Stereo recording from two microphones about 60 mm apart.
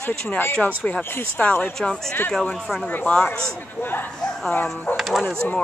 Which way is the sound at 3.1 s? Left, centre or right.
Centre.